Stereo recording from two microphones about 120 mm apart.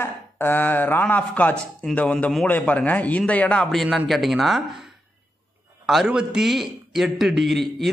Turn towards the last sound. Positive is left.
turn(degrees=0)  # may be behind; listen again after turning